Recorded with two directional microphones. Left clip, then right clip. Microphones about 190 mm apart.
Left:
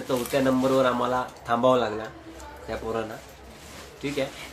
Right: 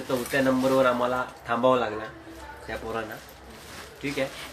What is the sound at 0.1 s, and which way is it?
Speech, 15° left (ahead or behind).